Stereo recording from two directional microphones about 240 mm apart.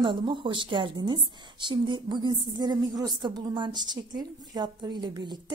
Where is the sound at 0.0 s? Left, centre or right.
Centre.